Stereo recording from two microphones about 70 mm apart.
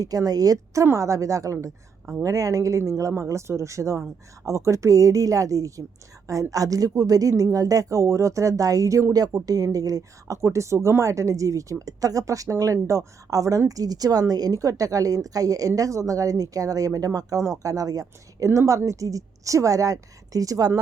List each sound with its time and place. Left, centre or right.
0.0 s a woman's voice: right
9.3 s a woman's voice: right